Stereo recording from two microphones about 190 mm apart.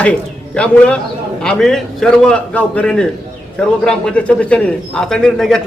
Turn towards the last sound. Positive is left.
turn(degrees=0)  # may be behind; listen again after turning